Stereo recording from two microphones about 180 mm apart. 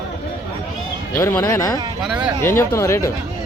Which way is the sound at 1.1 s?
20° left (ahead or behind).